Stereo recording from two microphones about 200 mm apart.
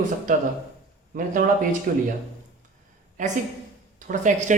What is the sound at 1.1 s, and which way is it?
Speech, 40° right (ahead or behind).